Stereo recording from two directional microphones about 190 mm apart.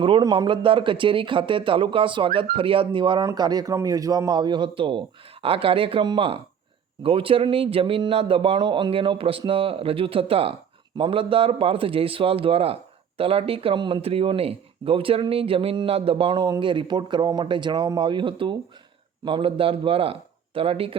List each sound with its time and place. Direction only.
0.0 s speech: 25° right (ahead or behind)